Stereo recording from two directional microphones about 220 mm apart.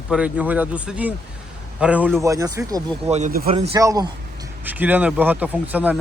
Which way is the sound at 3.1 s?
35° right (ahead or behind).